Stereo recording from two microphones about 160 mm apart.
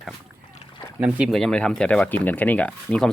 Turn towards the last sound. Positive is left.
turn(degrees=5)  # may be behind; listen again after turning